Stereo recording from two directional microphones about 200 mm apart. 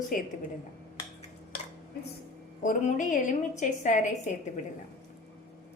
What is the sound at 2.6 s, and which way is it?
A woman's voice, 40° left (ahead or behind).